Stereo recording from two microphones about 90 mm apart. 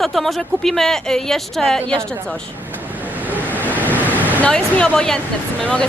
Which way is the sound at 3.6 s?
20° left (ahead or behind).